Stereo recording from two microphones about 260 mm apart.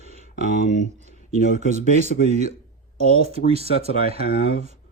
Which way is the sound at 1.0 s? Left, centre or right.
Right.